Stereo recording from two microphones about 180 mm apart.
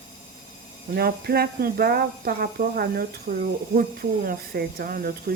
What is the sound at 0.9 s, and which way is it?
Speech, 60° right (ahead or behind).